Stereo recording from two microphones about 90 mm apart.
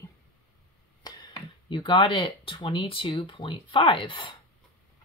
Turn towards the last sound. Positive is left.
turn(degrees=65)  # may be behind; listen again after turning